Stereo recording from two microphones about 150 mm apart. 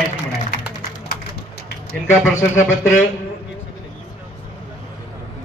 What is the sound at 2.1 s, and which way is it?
Speech, 15° left (ahead or behind).